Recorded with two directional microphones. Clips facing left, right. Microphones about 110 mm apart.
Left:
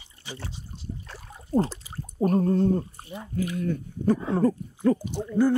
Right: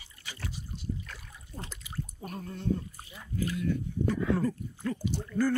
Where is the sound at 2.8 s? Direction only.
30° left (ahead or behind).